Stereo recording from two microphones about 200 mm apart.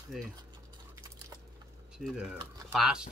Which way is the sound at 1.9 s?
5° right (ahead or behind).